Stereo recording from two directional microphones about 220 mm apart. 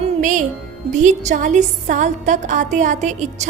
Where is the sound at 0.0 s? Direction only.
35° right (ahead or behind).